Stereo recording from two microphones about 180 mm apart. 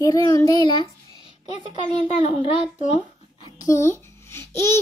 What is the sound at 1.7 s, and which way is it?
A child's voice, 35° left (ahead or behind).